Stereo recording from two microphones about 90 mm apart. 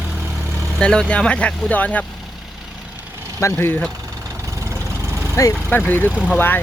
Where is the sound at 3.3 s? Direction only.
30° left (ahead or behind).